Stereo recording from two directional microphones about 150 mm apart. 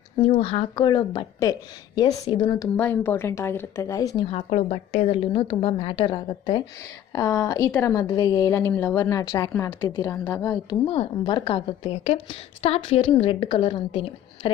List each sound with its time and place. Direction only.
0.2 s a woman's voice: 40° left (ahead or behind)
2.7 s speech: 15° left (ahead or behind)
4.3 s a woman's voice: 45° left (ahead or behind); by 9.7 s 20° left (ahead or behind)
9.7 s a woman's voice: 30° left (ahead or behind)
10.1 s speech: 15° left (ahead or behind)
10.7 s a woman's voice: 35° left (ahead or behind)